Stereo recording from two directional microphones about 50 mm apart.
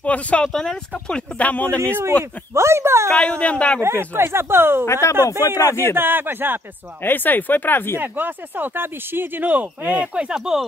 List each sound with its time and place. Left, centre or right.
0.0 s speech: left
0.5 s speech: centre
1.4 s speech: left
2.5 s speech: right
3.2 s speech: left
3.8 s speech: right
5.6 s speech: left
5.9 s speech: right
7.0 s speech: left
8.0 s speech: right
10.1 s speech: centre